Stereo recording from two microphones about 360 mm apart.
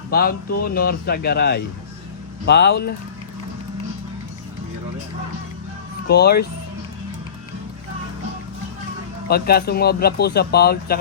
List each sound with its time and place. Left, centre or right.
0.1 s speech: left
6.1 s speech: left
9.2 s speech: left